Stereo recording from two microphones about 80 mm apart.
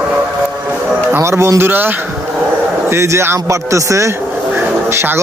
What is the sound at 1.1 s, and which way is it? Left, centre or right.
Speech, right.